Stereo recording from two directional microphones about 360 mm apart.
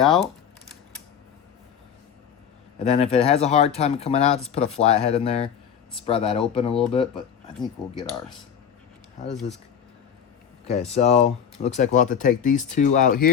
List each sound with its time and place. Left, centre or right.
0.0 s speech: centre
2.7 s speech: centre
10.7 s speech: centre